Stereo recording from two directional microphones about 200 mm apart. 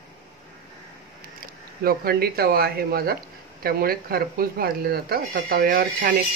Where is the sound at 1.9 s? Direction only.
50° right (ahead or behind).